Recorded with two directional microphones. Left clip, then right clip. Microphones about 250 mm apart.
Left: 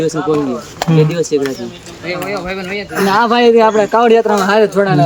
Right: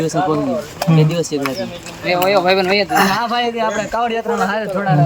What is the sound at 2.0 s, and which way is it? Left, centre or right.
Speech, right.